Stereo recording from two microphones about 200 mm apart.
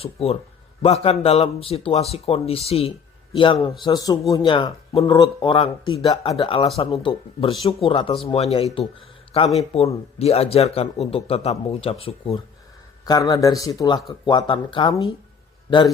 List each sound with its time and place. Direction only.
0.0 s speech: 30° left (ahead or behind)